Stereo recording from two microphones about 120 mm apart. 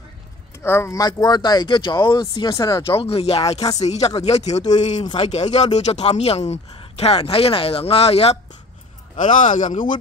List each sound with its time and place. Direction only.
0.6 s speech: 20° left (ahead or behind)
3.0 s speech: 55° left (ahead or behind); by 5.0 s 75° left (ahead or behind)
5.1 s speech: 65° left (ahead or behind)
9.1 s speech: 90° left